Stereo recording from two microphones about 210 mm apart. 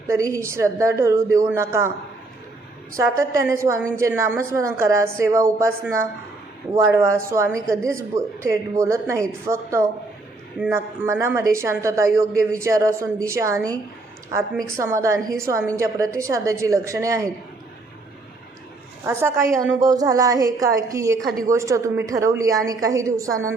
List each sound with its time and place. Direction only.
0.1 s a woman's voice: 15° right (ahead or behind)
2.9 s a woman's voice: 15° right (ahead or behind)
19.0 s a woman's voice: 10° right (ahead or behind)